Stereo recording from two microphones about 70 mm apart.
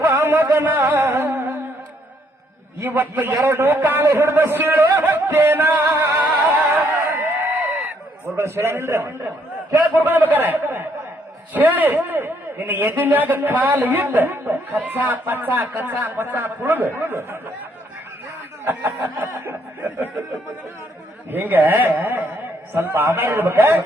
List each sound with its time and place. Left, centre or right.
0.0 s music: right
2.8 s a man's voice: right
7.2 s a sound: right
8.4 s a man's voice: right
18.6 s a man's voice: right
21.2 s a man's voice: right